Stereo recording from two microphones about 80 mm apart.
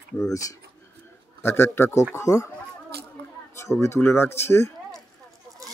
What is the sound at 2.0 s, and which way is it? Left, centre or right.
Speech, left.